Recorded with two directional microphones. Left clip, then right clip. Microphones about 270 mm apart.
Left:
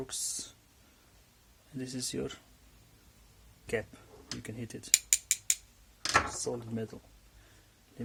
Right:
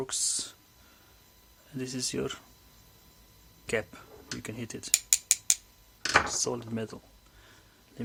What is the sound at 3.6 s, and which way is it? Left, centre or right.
Speech, centre.